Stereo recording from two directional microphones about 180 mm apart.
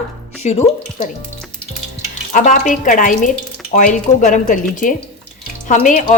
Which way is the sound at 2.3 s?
45° left (ahead or behind).